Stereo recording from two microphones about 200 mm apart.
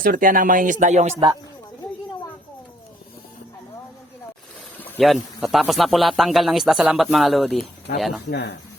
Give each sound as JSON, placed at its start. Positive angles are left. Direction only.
{"t": 0.0, "sound": "speech", "side_deg": -45}
{"t": 4.8, "sound": "a man's voice", "side_deg": 5}
{"t": 8.3, "sound": "speech", "side_deg": 60}